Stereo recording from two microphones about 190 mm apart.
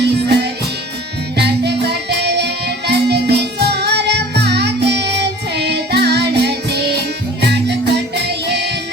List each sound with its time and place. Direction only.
0.0 s music: 60° right (ahead or behind)